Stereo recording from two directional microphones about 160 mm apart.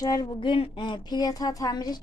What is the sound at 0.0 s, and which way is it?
A woman's voice, 25° left (ahead or behind).